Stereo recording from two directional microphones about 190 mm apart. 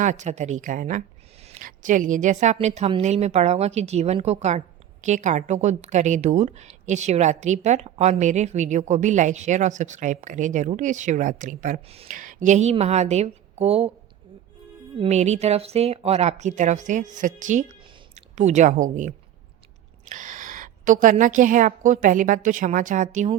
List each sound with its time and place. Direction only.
0.0 s a woman's voice: 40° right (ahead or behind)
14.9 s a woman's voice: 35° right (ahead or behind)